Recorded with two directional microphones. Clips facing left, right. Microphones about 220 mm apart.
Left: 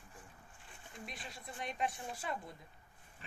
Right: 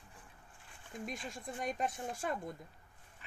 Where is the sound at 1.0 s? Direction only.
45° right (ahead or behind).